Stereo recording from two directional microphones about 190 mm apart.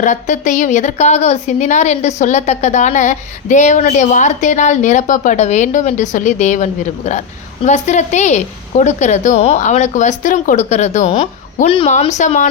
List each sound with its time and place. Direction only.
0.0 s a woman's voice: 40° left (ahead or behind)